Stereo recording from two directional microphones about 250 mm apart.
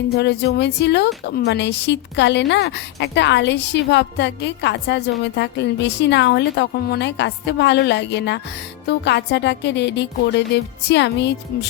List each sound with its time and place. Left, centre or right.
0.1 s speech: left